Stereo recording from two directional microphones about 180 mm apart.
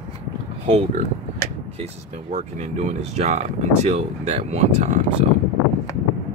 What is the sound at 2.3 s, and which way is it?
Speech, 40° right (ahead or behind).